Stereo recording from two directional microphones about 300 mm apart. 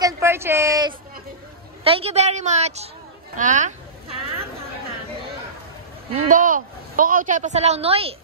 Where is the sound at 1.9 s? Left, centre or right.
Centre.